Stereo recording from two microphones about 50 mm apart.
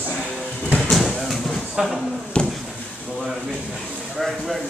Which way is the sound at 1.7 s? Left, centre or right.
Centre.